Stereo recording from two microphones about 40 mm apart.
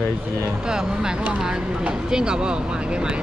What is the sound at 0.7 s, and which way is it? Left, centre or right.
Speech, centre.